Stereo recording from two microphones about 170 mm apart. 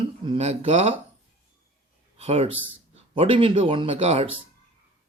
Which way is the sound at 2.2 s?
35° right (ahead or behind).